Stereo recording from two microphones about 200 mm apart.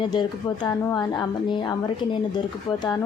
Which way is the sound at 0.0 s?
20° left (ahead or behind).